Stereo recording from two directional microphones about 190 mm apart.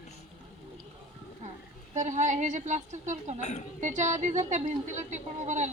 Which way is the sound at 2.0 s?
40° right (ahead or behind).